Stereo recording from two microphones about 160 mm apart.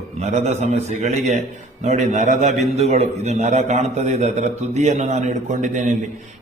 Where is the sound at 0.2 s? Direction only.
45° right (ahead or behind).